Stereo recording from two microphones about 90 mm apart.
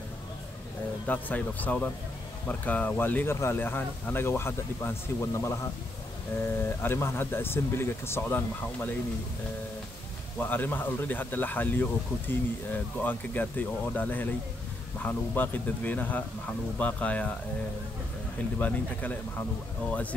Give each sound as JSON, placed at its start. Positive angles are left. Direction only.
{"t": 1.0, "sound": "speech", "side_deg": 15}
{"t": 10.4, "sound": "speech", "side_deg": 20}
{"t": 18.6, "sound": "speech", "side_deg": 20}